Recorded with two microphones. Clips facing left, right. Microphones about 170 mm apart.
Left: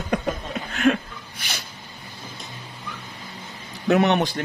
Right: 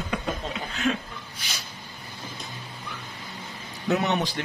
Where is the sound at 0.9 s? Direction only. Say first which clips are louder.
Left 7 dB; 65° left (ahead or behind).